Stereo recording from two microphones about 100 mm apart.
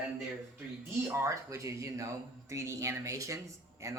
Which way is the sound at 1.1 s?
30° right (ahead or behind).